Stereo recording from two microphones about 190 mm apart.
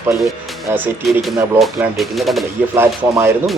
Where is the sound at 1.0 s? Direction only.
Centre (ahead or behind).